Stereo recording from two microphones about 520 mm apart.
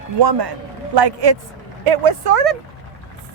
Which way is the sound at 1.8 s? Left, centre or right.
Right.